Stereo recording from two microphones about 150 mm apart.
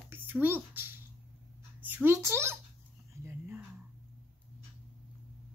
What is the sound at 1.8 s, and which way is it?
Speech, 15° right (ahead or behind).